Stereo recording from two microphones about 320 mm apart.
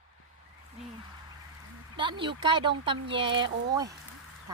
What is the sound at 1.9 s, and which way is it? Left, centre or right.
Speech, centre.